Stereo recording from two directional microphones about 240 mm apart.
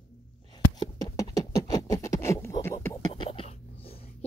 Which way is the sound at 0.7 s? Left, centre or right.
Centre.